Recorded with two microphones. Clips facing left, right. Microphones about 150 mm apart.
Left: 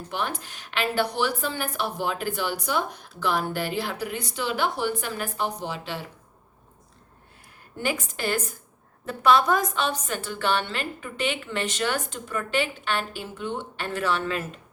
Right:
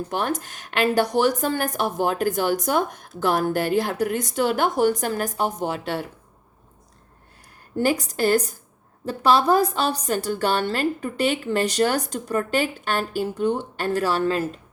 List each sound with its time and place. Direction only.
0.1 s a woman's voice: 45° right (ahead or behind)
7.8 s a woman's voice: 35° right (ahead or behind)